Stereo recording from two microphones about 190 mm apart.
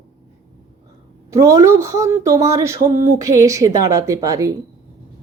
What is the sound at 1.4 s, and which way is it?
A woman's voice, 15° right (ahead or behind).